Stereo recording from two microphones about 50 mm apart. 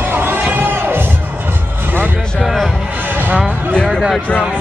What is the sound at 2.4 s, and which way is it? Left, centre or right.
Music, centre.